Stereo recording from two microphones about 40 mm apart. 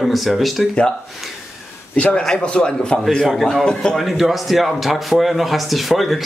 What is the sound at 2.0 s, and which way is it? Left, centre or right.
A man's voice, left.